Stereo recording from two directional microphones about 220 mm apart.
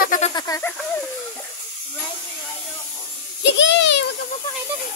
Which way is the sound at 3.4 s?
55° left (ahead or behind).